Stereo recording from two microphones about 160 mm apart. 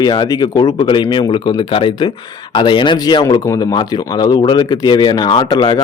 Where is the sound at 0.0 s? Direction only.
25° left (ahead or behind).